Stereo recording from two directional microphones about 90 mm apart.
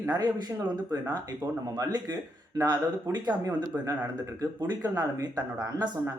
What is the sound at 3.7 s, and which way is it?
Speech, 25° right (ahead or behind).